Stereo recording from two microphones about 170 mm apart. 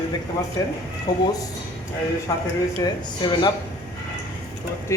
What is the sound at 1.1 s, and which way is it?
Speech, 25° left (ahead or behind).